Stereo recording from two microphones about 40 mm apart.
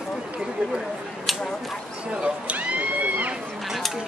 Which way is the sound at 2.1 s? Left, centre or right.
Right.